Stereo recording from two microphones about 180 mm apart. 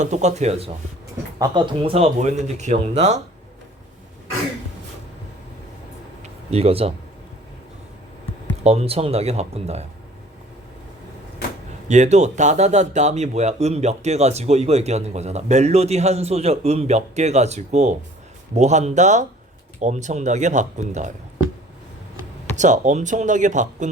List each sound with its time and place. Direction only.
0.0 s speech: 40° right (ahead or behind)
6.2 s a sound: 35° right (ahead or behind)
8.6 s speech: 35° right (ahead or behind)
11.9 s speech: 40° right (ahead or behind)
22.5 s speech: 40° right (ahead or behind)